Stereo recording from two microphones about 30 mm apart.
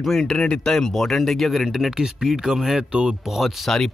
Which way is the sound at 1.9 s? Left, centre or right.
Centre.